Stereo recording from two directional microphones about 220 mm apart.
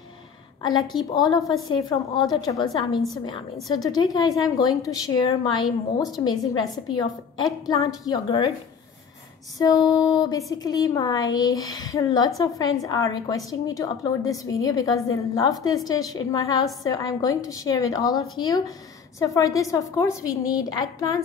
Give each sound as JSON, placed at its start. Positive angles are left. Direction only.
{"t": 0.6, "sound": "a woman's voice", "side_deg": 20}
{"t": 9.6, "sound": "a woman's voice", "side_deg": 15}